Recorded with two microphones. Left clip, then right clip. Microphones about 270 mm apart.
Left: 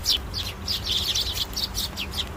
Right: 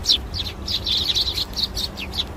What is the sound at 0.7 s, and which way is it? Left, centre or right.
Chirp, left.